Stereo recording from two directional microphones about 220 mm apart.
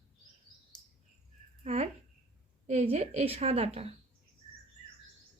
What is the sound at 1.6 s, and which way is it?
Speech, 30° right (ahead or behind).